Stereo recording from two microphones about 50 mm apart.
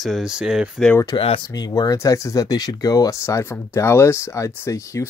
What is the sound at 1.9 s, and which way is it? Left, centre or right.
Speech, left.